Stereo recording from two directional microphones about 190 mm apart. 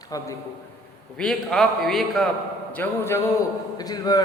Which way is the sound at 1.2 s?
Centre (ahead or behind).